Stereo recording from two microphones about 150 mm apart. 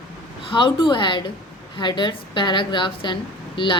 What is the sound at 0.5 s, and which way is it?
A woman's voice, 30° left (ahead or behind).